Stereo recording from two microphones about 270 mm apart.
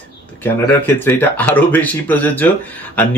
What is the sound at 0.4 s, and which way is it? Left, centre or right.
Speech, centre.